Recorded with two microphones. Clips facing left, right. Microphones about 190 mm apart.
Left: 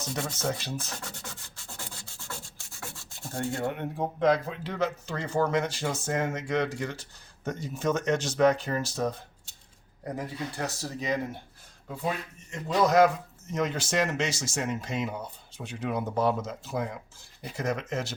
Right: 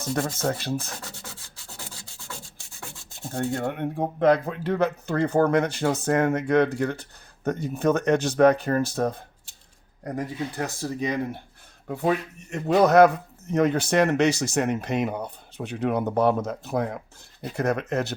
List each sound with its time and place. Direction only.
0.0 s speech: 55° right (ahead or behind)
3.3 s speech: 55° right (ahead or behind)
10.5 s speech: 55° right (ahead or behind)
11.9 s speech: 65° right (ahead or behind)